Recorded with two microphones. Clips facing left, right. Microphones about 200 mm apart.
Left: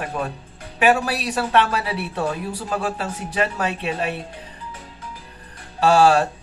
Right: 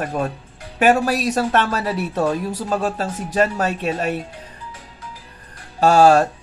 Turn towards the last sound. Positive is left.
turn(degrees=-45)  # may be behind; listen again after turning